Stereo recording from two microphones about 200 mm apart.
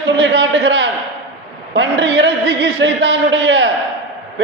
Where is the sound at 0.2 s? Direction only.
60° right (ahead or behind).